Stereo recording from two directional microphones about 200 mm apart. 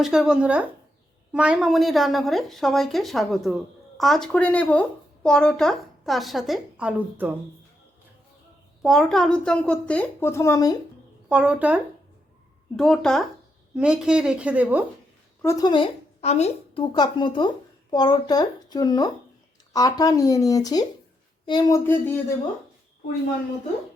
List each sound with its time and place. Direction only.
0.0 s a woman's voice: centre (ahead or behind)
8.8 s a woman's voice: centre (ahead or behind); by 10.8 s 15° left (ahead or behind)
11.3 s a woman's voice: 5° right (ahead or behind)
15.4 s a woman's voice: 15° left (ahead or behind)